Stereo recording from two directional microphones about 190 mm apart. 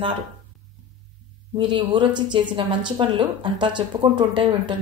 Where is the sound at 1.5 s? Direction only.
25° right (ahead or behind).